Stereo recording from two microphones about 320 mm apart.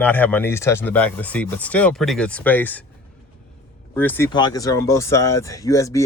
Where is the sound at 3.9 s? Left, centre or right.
Centre.